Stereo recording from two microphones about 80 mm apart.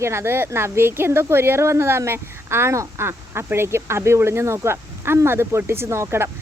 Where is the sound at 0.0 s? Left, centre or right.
Right.